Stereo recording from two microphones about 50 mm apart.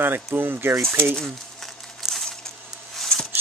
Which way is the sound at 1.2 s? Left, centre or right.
Centre.